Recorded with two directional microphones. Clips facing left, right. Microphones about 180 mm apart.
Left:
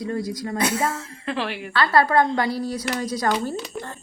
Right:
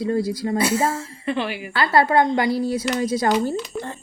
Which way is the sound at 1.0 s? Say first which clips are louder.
Right 3 dB; centre (ahead or behind).